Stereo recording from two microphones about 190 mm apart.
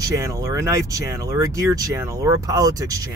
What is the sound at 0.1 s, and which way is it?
Speech, 15° right (ahead or behind).